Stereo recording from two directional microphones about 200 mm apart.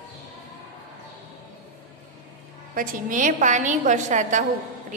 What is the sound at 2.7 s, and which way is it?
A woman's voice, 45° right (ahead or behind).